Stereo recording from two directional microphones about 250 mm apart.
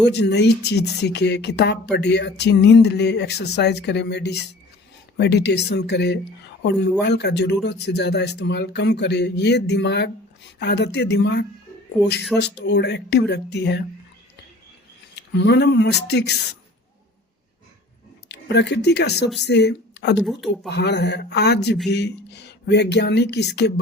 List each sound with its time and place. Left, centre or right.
0.1 s speech: left
15.1 s speech: left
18.3 s speech: left
20.1 s speech: centre
20.7 s speech: left